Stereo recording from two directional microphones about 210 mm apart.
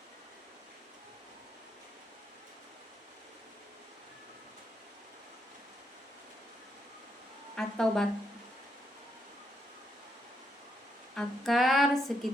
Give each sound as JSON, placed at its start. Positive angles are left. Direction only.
{"t": 7.5, "sound": "music", "side_deg": 5}
{"t": 11.1, "sound": "music", "side_deg": 0}